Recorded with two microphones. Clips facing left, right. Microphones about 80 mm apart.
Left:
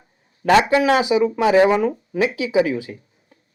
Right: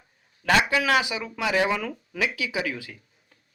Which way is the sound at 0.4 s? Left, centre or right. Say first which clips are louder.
Left 7 dB; left.